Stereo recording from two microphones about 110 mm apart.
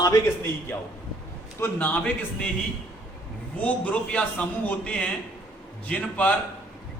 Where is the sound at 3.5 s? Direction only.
15° left (ahead or behind).